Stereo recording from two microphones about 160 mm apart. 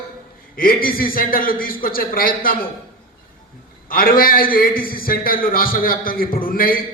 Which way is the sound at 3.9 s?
65° left (ahead or behind).